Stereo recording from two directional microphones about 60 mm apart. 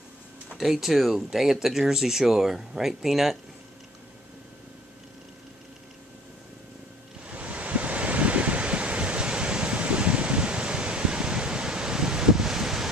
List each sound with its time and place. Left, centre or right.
0.6 s speech: centre
7.2 s waves: right